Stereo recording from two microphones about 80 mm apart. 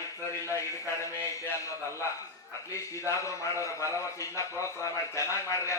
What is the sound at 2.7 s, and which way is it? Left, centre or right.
A man's voice, left.